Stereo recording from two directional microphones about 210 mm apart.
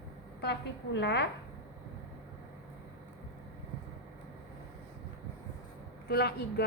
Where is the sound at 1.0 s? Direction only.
55° left (ahead or behind).